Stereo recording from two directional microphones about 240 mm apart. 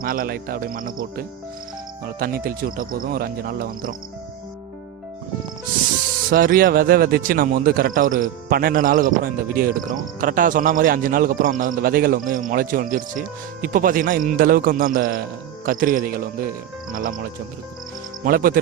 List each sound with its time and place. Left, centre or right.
0.0 s speech: right
6.3 s speech: right
18.3 s speech: right